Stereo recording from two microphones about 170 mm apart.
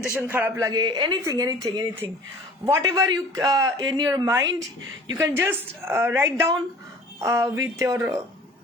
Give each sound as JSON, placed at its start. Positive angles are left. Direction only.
{"t": 0.2, "sound": "a man's voice", "side_deg": -10}